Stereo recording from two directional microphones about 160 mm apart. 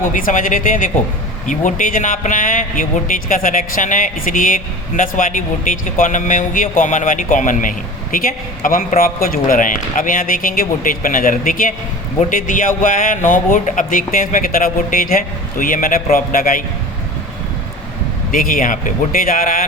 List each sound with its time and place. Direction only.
0.0 s a man's voice: 55° left (ahead or behind)
18.3 s a man's voice: 60° left (ahead or behind)